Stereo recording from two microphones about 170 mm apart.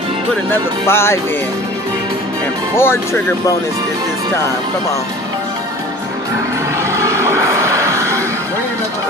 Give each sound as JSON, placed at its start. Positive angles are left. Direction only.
{"t": 0.5, "sound": "speech", "side_deg": 15}
{"t": 2.8, "sound": "speech", "side_deg": 15}
{"t": 6.8, "sound": "music", "side_deg": -15}